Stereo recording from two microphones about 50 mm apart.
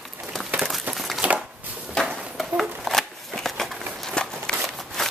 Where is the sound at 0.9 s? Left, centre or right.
Centre.